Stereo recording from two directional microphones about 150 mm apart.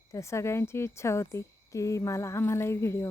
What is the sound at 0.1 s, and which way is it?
A woman's voice, 20° left (ahead or behind).